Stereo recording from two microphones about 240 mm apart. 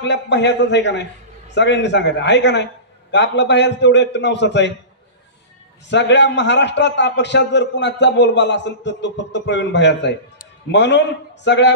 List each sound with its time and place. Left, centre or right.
0.0 s a man's voice: left
5.9 s a man's voice: left